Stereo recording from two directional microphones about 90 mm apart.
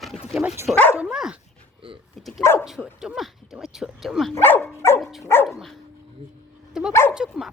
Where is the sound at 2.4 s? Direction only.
30° left (ahead or behind).